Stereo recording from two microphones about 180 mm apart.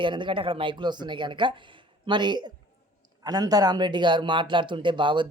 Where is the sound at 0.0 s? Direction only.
25° right (ahead or behind).